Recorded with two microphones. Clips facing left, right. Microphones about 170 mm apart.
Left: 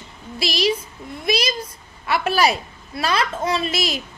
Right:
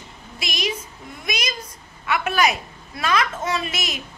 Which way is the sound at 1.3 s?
30° left (ahead or behind).